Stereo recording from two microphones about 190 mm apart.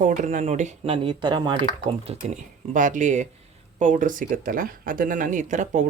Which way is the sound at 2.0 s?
40° right (ahead or behind).